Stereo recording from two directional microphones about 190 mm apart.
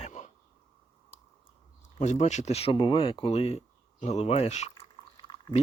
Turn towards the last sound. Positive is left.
turn(degrees=25)  # may be behind; listen again after turning